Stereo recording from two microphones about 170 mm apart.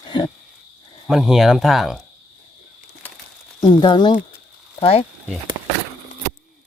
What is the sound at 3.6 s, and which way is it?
Speech, 25° left (ahead or behind).